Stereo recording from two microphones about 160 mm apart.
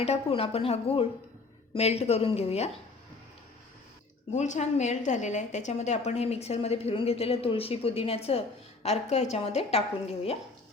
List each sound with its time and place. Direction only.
0.0 s a woman's voice: 40° left (ahead or behind)
4.4 s a woman's voice: 45° left (ahead or behind)